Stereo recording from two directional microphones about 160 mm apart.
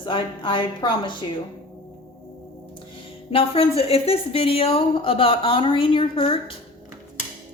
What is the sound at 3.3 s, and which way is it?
Speech, 40° left (ahead or behind).